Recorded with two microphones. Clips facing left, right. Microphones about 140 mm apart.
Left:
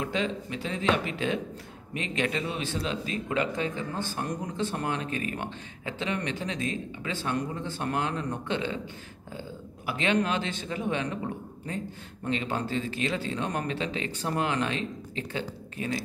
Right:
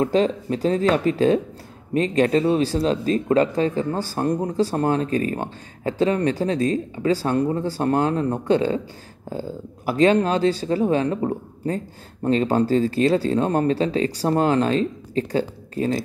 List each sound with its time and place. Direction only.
0.0 s speech: 40° right (ahead or behind)